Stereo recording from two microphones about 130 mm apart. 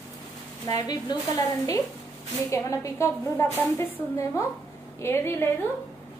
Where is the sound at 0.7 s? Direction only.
30° left (ahead or behind).